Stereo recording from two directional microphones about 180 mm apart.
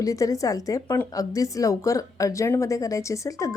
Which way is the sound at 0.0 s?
20° left (ahead or behind).